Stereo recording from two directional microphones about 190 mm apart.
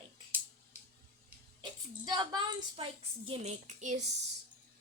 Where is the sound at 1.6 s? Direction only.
20° right (ahead or behind); by 4.0 s 40° right (ahead or behind).